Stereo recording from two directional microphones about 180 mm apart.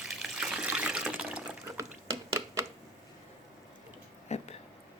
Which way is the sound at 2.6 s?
15° right (ahead or behind).